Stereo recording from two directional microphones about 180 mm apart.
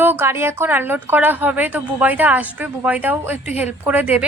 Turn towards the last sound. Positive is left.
turn(degrees=-10)  # may be behind; listen again after turning